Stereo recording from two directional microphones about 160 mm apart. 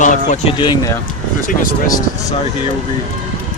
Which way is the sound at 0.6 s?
30° left (ahead or behind).